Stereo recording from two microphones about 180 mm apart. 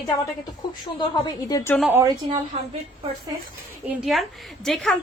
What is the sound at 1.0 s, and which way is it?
Speech, 25° left (ahead or behind).